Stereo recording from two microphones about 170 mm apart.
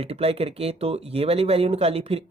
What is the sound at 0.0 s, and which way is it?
Speech, 35° right (ahead or behind).